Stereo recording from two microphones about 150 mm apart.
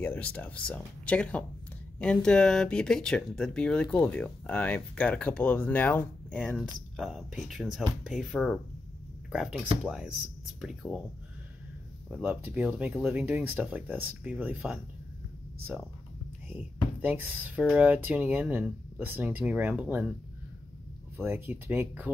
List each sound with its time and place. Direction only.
0.0 s speech: 10° left (ahead or behind)
12.1 s speech: 10° right (ahead or behind)
16.5 s speech: 10° right (ahead or behind)
21.2 s speech: 15° right (ahead or behind)